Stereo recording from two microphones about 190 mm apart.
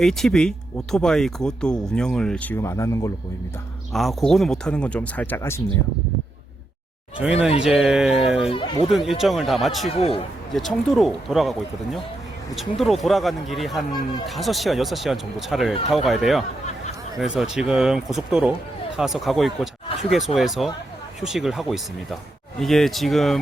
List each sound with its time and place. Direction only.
0.0 s speech: centre (ahead or behind)
3.9 s speech: centre (ahead or behind)
7.2 s speech: 5° right (ahead or behind)
8.5 s speech: 25° left (ahead or behind)
8.9 s speech: centre (ahead or behind)
9.9 s a man's voice: 30° left (ahead or behind)
10.5 s speech: centre (ahead or behind)
13.9 s speech: 25° left (ahead or behind)
14.3 s speech: centre (ahead or behind)